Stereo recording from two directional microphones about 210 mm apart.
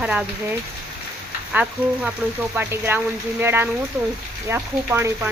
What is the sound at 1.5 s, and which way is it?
Frying, 5° right (ahead or behind).